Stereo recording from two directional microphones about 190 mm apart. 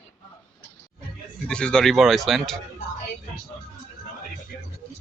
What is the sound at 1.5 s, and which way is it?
Speech, 5° left (ahead or behind).